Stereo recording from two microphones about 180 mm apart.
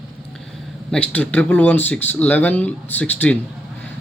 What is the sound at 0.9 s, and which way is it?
Speech, 10° left (ahead or behind).